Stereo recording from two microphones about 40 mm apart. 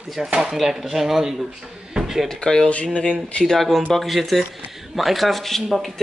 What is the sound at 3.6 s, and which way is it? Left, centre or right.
Speech, centre.